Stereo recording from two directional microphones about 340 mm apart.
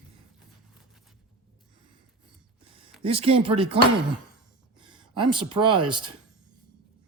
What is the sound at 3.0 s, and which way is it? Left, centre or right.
Speech, centre.